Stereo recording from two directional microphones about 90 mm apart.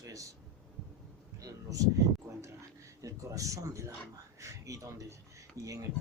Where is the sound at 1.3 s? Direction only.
40° right (ahead or behind).